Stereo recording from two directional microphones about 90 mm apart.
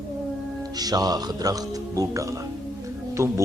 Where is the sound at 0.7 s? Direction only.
45° right (ahead or behind).